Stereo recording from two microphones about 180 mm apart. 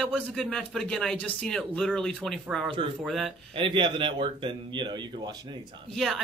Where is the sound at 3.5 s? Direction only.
25° right (ahead or behind).